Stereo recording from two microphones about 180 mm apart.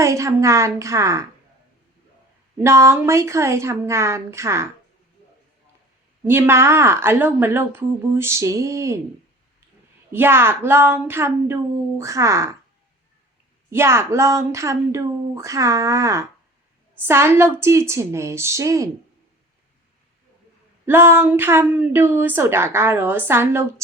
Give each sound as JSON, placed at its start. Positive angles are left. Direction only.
{"t": 0.0, "sound": "a woman's voice", "side_deg": -15}
{"t": 2.6, "sound": "a woman's voice", "side_deg": -15}
{"t": 6.2, "sound": "a woman's voice", "side_deg": -10}
{"t": 10.1, "sound": "a woman's voice", "side_deg": -10}
{"t": 13.7, "sound": "a woman's voice", "side_deg": -15}
{"t": 20.8, "sound": "a woman's voice", "side_deg": -15}